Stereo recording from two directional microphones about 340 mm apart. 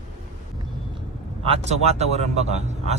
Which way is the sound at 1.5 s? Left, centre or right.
Centre.